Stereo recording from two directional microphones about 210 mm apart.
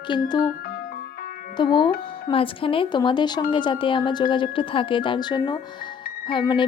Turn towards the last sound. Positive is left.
turn(degrees=25)  # may be behind; listen again after turning